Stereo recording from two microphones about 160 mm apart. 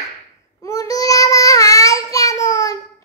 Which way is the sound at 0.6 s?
20° left (ahead or behind).